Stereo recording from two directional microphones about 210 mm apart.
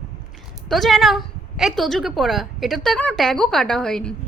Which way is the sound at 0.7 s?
Centre (ahead or behind).